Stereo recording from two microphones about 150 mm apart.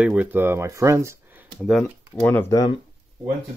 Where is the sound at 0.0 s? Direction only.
10° right (ahead or behind).